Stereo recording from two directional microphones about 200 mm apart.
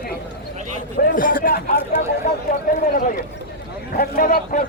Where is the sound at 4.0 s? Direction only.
45° left (ahead or behind).